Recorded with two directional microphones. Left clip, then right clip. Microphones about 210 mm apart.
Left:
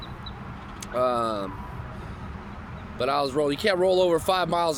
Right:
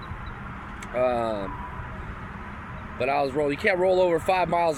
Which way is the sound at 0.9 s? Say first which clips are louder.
Even; 20° left (ahead or behind).